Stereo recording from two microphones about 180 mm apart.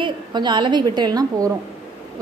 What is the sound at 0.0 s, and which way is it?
A woman's voice, 25° right (ahead or behind).